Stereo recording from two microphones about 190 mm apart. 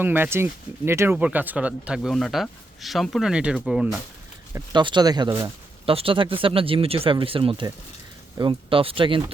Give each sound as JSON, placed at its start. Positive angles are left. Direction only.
{"t": 0.0, "sound": "speech", "side_deg": -10}
{"t": 4.5, "sound": "speech", "side_deg": -25}